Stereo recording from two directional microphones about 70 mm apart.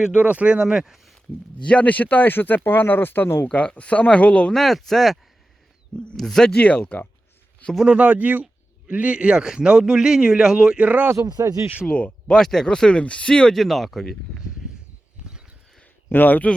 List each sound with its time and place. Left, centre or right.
0.0 s speech: centre
1.6 s speech: centre
3.5 s speech: centre
4.5 s speech: centre; by 7.1 s left
7.9 s speech: centre
11.2 s speech: right
11.9 s speech: centre
13.6 s speech: centre
15.2 s a sound: centre
16.0 s speech: left